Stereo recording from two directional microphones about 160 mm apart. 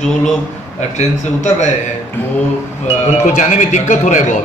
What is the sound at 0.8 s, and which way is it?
Speech, 45° left (ahead or behind).